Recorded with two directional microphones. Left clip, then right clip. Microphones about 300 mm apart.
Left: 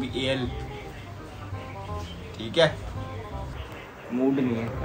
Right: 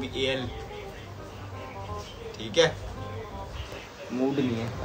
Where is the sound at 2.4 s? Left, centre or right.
Centre.